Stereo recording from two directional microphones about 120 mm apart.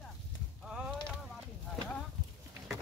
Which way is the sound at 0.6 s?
5° right (ahead or behind).